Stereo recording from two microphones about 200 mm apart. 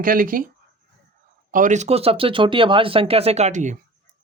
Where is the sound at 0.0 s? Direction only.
45° right (ahead or behind).